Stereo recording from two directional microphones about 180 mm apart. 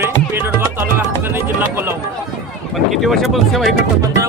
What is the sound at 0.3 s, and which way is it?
Music, 10° right (ahead or behind).